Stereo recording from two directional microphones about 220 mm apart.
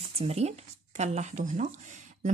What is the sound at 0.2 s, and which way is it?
A woman's voice, 30° right (ahead or behind).